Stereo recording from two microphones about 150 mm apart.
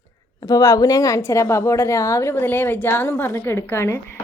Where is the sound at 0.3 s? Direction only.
25° left (ahead or behind).